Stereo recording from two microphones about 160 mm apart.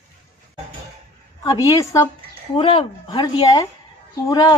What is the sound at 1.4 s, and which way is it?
A woman's voice, 20° left (ahead or behind).